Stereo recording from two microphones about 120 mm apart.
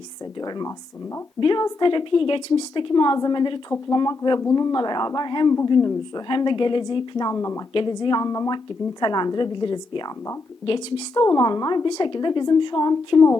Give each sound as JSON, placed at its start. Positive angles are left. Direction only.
{"t": 1.4, "sound": "a woman's voice", "side_deg": 40}
{"t": 7.7, "sound": "a woman's voice", "side_deg": 45}
{"t": 11.1, "sound": "a woman's voice", "side_deg": 30}
{"t": 11.9, "sound": "a woman's voice", "side_deg": 40}